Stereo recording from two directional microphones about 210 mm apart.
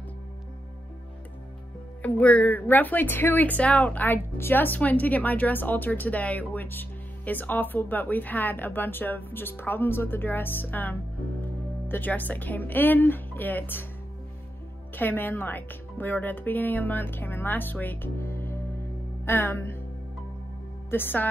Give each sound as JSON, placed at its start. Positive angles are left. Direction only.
{"t": 2.0, "sound": "speech", "side_deg": 5}
{"t": 15.0, "sound": "speech", "side_deg": 10}
{"t": 20.9, "sound": "speech", "side_deg": 10}